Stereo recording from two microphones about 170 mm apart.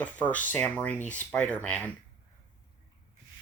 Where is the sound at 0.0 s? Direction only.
10° left (ahead or behind).